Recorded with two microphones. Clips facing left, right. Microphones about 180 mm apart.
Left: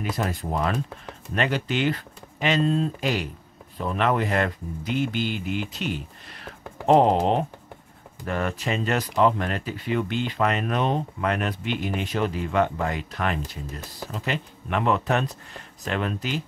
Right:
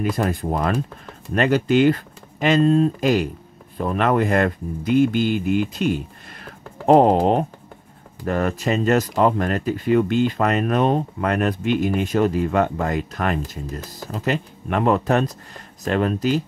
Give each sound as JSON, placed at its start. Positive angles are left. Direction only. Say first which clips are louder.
{"t": 0.1, "sound": "speech", "louder": "right 5 dB", "side_deg": -50}